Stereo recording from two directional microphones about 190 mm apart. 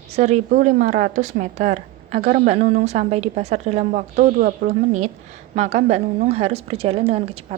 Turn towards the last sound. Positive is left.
turn(degrees=-30)  # may be behind; listen again after turning